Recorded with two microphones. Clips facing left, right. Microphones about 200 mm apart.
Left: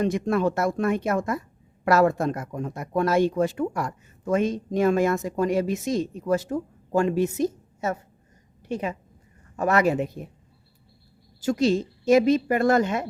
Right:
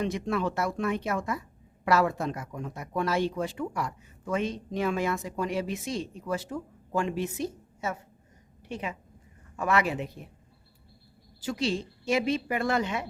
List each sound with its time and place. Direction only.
0.0 s a woman's voice: 45° left (ahead or behind)
11.3 s speech: 45° left (ahead or behind)